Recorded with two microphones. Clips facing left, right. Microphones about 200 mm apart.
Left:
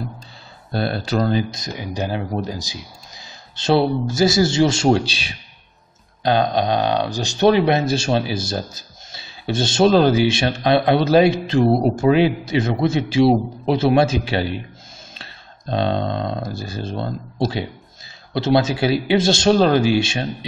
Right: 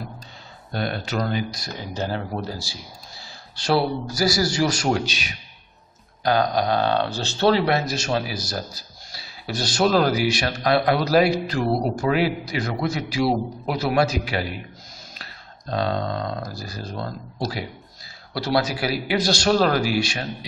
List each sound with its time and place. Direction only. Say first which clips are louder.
0.7 s speech: left 5 dB; 35° left (ahead or behind)
1.7 s a man's voice: left 3 dB; 15° left (ahead or behind)